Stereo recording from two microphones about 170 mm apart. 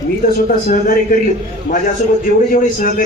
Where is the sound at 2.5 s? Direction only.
55° left (ahead or behind).